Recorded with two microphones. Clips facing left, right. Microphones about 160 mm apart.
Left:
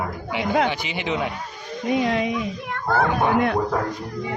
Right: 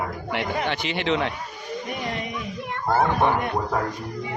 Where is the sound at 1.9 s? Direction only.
90° left.